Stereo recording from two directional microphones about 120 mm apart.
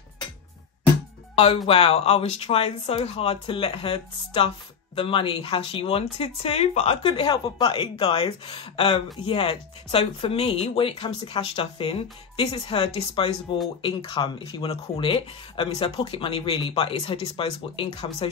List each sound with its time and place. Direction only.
1.3 s speech: 55° left (ahead or behind)
7.2 s speech: 45° left (ahead or behind)
7.8 s speech: 55° left (ahead or behind)
13.5 s speech: 40° left (ahead or behind)
14.7 s speech: 50° left (ahead or behind)